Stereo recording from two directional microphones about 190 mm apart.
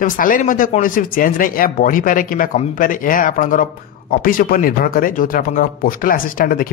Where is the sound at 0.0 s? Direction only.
45° left (ahead or behind).